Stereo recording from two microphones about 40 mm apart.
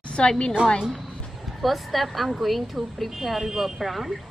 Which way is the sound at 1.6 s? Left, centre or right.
Centre.